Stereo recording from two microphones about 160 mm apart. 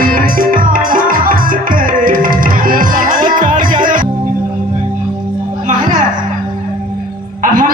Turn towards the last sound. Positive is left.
turn(degrees=-55)  # may be behind; listen again after turning